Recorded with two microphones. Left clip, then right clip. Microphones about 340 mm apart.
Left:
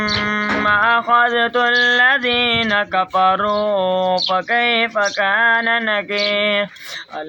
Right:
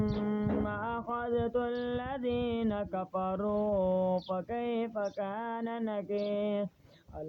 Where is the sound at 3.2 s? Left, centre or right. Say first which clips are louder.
Left 19 dB; right.